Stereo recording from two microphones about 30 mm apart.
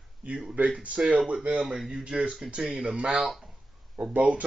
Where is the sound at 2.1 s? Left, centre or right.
Right.